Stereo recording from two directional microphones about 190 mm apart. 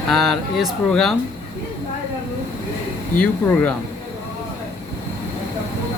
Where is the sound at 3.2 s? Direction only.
5° left (ahead or behind).